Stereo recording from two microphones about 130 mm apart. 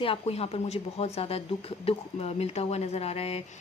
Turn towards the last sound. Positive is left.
turn(degrees=50)  # may be behind; listen again after turning